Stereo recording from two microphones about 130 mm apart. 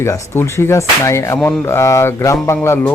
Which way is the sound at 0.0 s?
20° left (ahead or behind).